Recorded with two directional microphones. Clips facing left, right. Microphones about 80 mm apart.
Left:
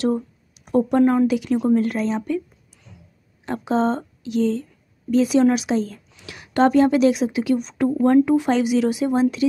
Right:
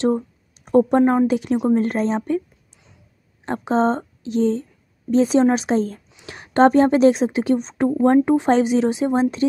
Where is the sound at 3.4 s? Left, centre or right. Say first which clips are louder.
Right 2 dB; right.